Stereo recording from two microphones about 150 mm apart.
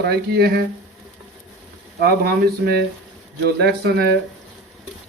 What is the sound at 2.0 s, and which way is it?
Speech, 90° right.